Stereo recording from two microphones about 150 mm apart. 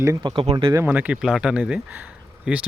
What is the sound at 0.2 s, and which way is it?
Speech, 35° right (ahead or behind).